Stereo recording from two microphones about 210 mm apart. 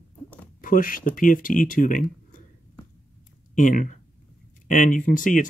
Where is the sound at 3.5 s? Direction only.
40° left (ahead or behind).